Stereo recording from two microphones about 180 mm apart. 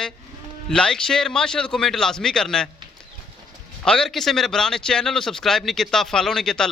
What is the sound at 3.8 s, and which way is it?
A man's voice, 5° left (ahead or behind).